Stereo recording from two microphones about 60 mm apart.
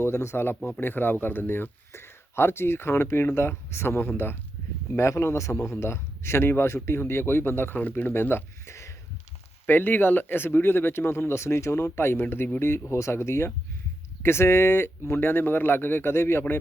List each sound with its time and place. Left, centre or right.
0.0 s speech: left
4.9 s speech: left
9.6 s speech: left
12.9 s speech: left